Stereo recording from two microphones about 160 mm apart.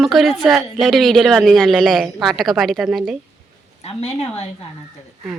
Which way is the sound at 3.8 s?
40° left (ahead or behind).